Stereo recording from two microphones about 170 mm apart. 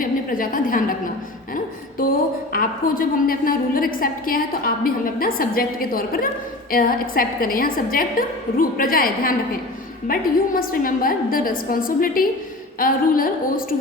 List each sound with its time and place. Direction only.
0.0 s a woman's voice: 55° left (ahead or behind)
2.0 s a woman's voice: 60° left (ahead or behind)